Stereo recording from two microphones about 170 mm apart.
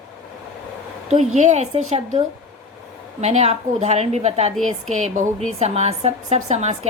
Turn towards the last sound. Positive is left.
turn(degrees=-40)  # may be behind; listen again after turning